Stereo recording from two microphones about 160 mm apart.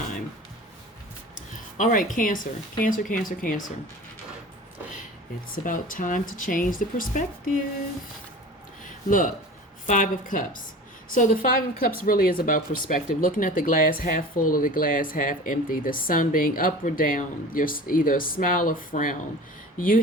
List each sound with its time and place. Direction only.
1.8 s speech: 55° left (ahead or behind)
5.6 s speech: 55° left (ahead or behind)
8.8 s a sound: 55° left (ahead or behind)
9.8 s speech: 55° left (ahead or behind)